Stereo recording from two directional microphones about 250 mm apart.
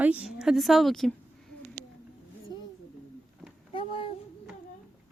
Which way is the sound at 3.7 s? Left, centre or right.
Left.